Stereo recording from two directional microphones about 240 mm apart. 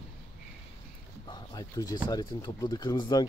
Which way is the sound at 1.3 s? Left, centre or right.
Centre.